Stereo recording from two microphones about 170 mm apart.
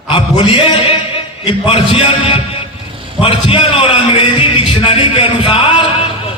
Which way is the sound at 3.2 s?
30° left (ahead or behind).